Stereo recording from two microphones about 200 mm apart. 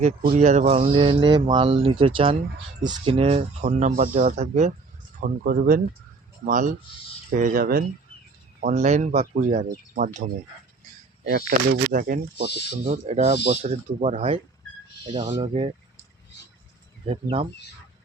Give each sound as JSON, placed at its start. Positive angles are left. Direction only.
{"t": 0.2, "sound": "speech", "side_deg": -40}
{"t": 5.4, "sound": "speech", "side_deg": -45}
{"t": 8.6, "sound": "speech", "side_deg": -35}
{"t": 12.8, "sound": "speech", "side_deg": -35}
{"t": 17.1, "sound": "speech", "side_deg": -25}